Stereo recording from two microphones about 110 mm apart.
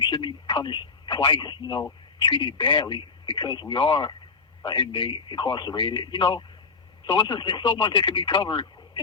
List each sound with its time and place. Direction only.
0.0 s telephone: 45° left (ahead or behind)
2.1 s speech: 45° left (ahead or behind)